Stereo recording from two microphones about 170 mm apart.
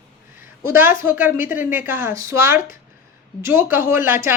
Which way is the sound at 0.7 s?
15° right (ahead or behind).